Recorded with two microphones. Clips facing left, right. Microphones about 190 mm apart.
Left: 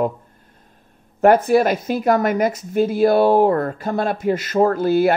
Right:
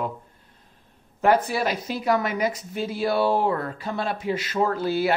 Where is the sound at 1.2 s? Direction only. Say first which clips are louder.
Left 7 dB; 50° left (ahead or behind).